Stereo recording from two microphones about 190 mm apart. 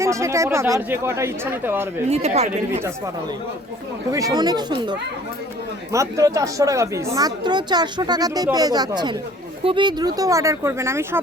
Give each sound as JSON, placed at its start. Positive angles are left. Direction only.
{"t": 0.0, "sound": "speech", "side_deg": -15}
{"t": 2.0, "sound": "speech", "side_deg": -35}
{"t": 4.1, "sound": "speech", "side_deg": -20}